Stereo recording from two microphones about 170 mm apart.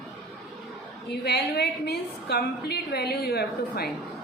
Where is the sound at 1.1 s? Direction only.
75° left (ahead or behind).